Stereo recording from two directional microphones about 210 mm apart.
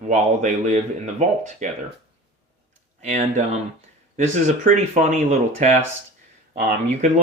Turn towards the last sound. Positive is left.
turn(degrees=-35)  # may be behind; listen again after turning